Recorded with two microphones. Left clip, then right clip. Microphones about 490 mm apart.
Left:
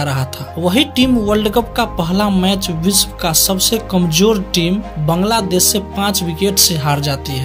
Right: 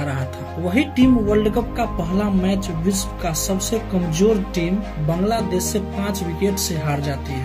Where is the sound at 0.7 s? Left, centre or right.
Centre.